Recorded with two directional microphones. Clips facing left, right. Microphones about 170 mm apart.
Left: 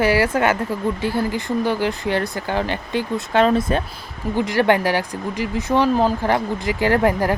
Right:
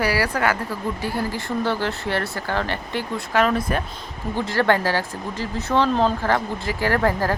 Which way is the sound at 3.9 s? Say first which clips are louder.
Left 3 dB; 10° left (ahead or behind).